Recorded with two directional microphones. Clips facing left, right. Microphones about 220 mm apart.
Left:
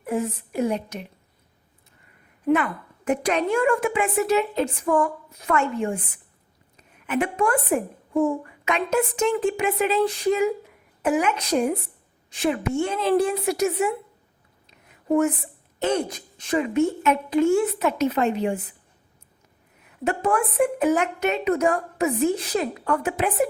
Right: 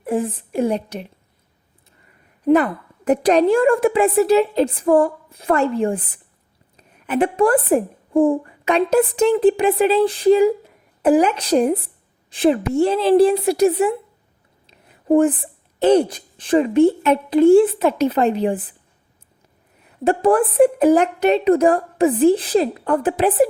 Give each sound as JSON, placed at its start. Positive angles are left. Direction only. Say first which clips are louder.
{"t": 0.0, "sound": "a woman's voice", "louder": "right 4 dB", "side_deg": -30}
{"t": 2.5, "sound": "a woman's voice", "louder": "right 6 dB", "side_deg": -35}
{"t": 14.7, "sound": "a sound", "louder": "right 6 dB", "side_deg": -30}
{"t": 15.8, "sound": "a woman's voice", "louder": "right 9 dB", "side_deg": -35}
{"t": 20.1, "sound": "a woman's voice", "louder": "right 8 dB", "side_deg": -35}